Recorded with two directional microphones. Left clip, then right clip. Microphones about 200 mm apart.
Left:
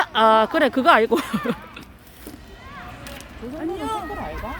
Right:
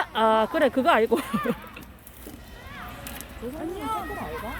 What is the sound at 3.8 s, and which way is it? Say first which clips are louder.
Speech: left 2 dB; 55° left (ahead or behind).